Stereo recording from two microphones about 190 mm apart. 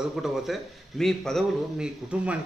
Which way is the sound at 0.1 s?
Centre (ahead or behind).